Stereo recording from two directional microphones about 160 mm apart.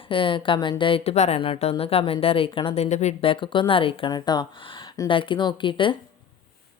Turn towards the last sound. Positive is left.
turn(degrees=30)  # may be behind; listen again after turning